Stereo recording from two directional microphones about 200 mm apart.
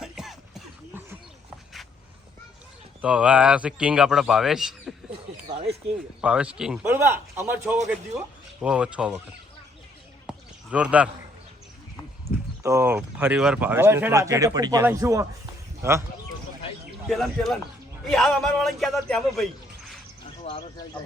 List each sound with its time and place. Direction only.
0.0 s a sound: centre (ahead or behind)
3.0 s a man's voice: 5° right (ahead or behind)
5.5 s speech: 30° right (ahead or behind)
6.2 s a man's voice: 5° right (ahead or behind)
10.2 s a sound: 5° right (ahead or behind)
12.6 s speech: 10° right (ahead or behind)
17.1 s a man's voice: centre (ahead or behind)
20.4 s speech: 30° left (ahead or behind)